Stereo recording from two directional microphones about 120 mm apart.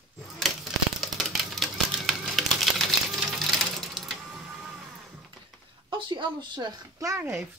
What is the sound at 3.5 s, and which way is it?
Music, centre (ahead or behind).